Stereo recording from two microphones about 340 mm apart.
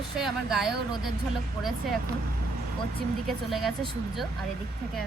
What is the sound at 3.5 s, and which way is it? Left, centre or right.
Speech, centre.